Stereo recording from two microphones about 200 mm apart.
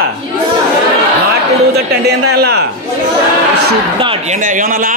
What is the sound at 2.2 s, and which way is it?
Speech, 55° right (ahead or behind).